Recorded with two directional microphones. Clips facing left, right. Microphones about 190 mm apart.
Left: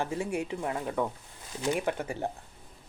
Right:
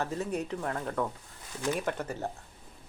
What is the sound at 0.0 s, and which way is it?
Speech, 10° left (ahead or behind).